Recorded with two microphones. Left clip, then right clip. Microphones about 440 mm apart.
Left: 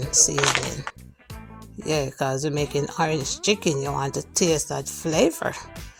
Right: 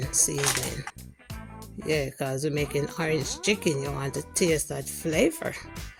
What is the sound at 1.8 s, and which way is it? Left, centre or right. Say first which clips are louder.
Speech: left 4 dB; right.